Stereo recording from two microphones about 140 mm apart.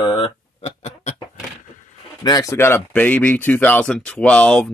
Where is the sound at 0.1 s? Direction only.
40° left (ahead or behind).